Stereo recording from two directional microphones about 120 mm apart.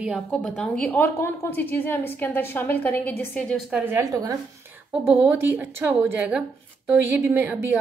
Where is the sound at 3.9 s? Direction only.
25° right (ahead or behind).